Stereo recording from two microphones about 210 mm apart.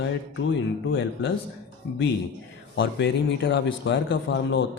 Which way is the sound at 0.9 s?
60° left (ahead or behind).